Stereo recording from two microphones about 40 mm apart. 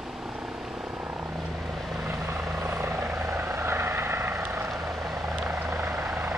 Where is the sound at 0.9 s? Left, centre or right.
Right.